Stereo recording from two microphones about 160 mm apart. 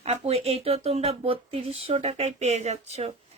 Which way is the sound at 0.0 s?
40° right (ahead or behind).